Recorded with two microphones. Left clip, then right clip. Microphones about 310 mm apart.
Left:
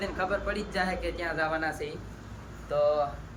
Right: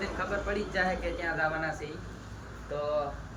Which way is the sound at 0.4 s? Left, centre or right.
Centre.